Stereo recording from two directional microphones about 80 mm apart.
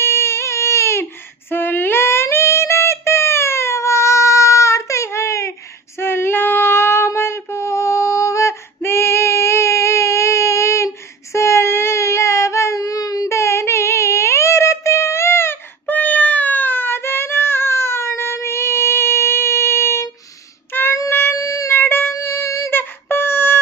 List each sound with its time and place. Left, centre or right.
0.0 s baby cry: left
1.5 s female singing: left
5.9 s child singing: left
16.0 s a sound: centre
20.7 s child singing: left
21.1 s a sound: left
21.7 s music: left
22.1 s music: left
22.7 s a sound: left